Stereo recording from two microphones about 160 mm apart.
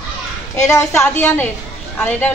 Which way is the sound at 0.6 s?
20° left (ahead or behind).